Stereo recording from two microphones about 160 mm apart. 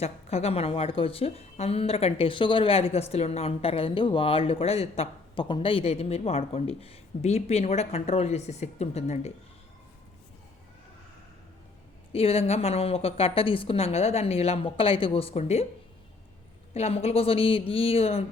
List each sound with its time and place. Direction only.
0.0 s a woman's voice: 40° left (ahead or behind)
12.1 s a woman's voice: 40° left (ahead or behind)
16.7 s a woman's voice: 40° left (ahead or behind)